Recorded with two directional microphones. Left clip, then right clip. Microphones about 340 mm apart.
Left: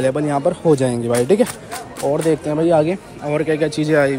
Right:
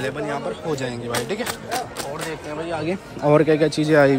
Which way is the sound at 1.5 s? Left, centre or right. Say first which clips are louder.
Right 3 dB; right.